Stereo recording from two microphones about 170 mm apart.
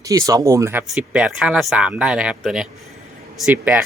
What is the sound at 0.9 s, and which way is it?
Speech, 5° right (ahead or behind).